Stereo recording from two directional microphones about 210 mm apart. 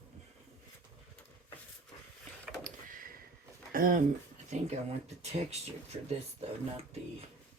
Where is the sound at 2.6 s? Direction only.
40° right (ahead or behind).